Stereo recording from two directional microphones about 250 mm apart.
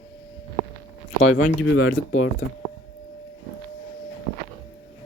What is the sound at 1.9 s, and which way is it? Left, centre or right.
Speech, left.